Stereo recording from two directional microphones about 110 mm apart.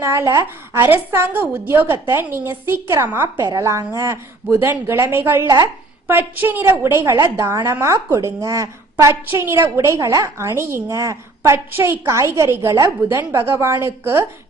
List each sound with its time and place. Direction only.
0.0 s a woman's voice: 25° right (ahead or behind)
3.4 s a woman's voice: 30° right (ahead or behind)